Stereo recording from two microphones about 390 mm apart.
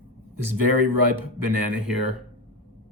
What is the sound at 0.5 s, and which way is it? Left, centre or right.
Speech, right.